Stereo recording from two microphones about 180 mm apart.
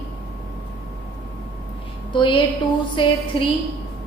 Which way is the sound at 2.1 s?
25° left (ahead or behind).